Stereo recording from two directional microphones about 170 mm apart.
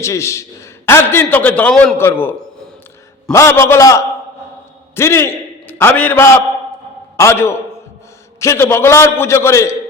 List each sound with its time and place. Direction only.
0.0 s a man's voice: 15° left (ahead or behind)
3.3 s a man's voice: 15° left (ahead or behind)